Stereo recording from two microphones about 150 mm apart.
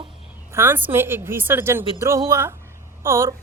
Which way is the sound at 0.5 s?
15° right (ahead or behind).